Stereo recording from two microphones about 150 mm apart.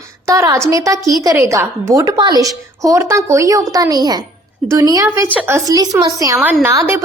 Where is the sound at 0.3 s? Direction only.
20° right (ahead or behind).